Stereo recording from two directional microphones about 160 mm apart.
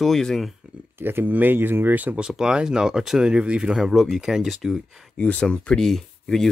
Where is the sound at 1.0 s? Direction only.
15° right (ahead or behind); by 6.5 s centre (ahead or behind).